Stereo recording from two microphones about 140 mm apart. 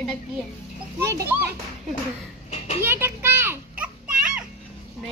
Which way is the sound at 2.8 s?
15° right (ahead or behind).